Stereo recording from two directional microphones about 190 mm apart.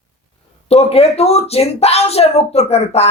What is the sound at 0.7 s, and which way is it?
Speech, 30° left (ahead or behind).